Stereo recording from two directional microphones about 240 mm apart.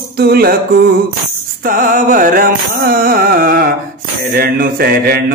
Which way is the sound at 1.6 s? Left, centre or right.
Right.